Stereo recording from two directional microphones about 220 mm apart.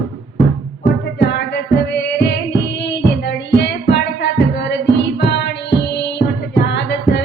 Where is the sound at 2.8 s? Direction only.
50° left (ahead or behind).